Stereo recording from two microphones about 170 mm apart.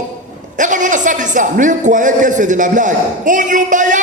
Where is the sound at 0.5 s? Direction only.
50° right (ahead or behind).